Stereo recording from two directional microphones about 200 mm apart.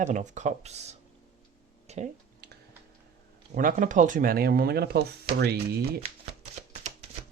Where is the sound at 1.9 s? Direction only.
35° right (ahead or behind).